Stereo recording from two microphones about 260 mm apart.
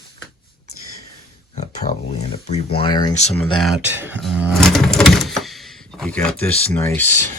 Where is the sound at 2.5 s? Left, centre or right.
Left.